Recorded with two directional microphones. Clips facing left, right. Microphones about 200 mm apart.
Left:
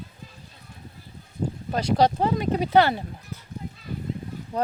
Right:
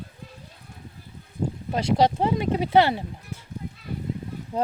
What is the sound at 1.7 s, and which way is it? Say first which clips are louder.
Speech: even; 25° right (ahead or behind).